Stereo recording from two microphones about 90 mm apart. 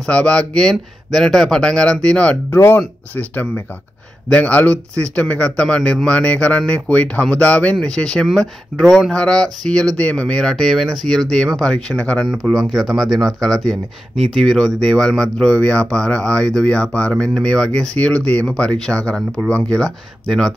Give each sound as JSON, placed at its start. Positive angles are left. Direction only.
{"t": 0.0, "sound": "speech", "side_deg": 10}
{"t": 2.5, "sound": "speech", "side_deg": 25}
{"t": 12.6, "sound": "speech", "side_deg": 0}